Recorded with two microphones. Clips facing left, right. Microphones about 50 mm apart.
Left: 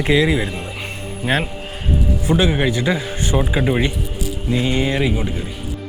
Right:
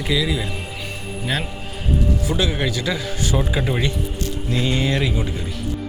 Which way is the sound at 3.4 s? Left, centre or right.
Centre.